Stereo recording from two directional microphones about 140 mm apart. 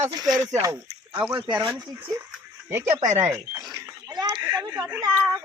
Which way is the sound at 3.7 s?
25° right (ahead or behind).